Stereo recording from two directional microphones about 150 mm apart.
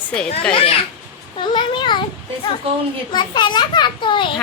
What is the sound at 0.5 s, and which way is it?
A child's voice, 40° left (ahead or behind).